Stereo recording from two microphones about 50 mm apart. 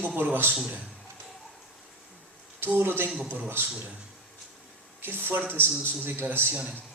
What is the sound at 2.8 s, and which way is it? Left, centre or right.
Speech, right.